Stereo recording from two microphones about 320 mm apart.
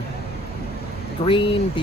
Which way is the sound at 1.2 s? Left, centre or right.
Centre.